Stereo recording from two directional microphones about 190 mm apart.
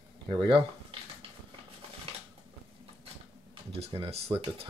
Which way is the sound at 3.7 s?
30° right (ahead or behind).